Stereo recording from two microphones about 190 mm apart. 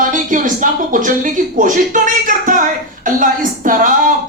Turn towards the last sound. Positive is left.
turn(degrees=-45)  # may be behind; listen again after turning